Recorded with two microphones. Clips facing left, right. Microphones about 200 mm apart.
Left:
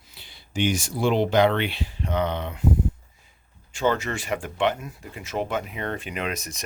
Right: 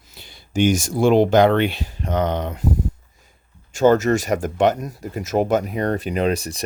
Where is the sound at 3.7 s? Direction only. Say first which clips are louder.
Right 9 dB; 45° right (ahead or behind).